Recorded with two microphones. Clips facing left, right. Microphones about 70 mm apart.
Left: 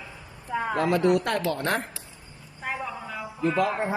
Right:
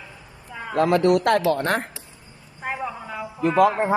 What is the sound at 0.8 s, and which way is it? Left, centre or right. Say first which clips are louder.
Speech: right 5 dB; right.